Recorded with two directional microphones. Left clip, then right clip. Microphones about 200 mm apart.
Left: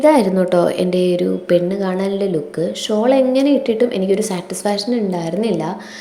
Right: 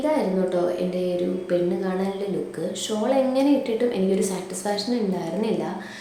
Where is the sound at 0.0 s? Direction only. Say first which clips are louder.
Left 10 dB; 40° left (ahead or behind).